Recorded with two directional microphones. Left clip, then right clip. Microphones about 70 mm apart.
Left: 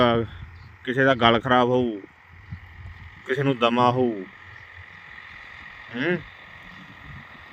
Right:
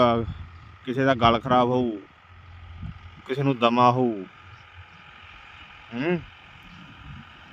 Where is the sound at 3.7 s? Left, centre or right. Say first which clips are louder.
Right 1 dB; right.